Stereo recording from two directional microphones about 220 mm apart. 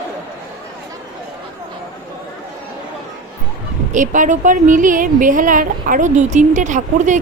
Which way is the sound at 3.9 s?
35° right (ahead or behind).